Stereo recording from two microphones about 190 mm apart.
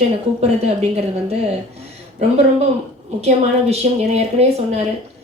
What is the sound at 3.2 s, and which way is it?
A woman's voice, 35° right (ahead or behind).